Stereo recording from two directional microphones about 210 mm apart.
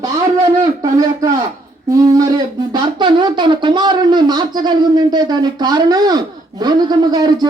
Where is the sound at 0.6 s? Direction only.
15° right (ahead or behind).